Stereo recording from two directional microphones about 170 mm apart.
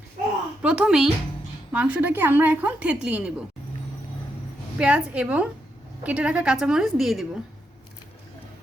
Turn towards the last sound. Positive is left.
turn(degrees=0)  # may be behind; listen again after turning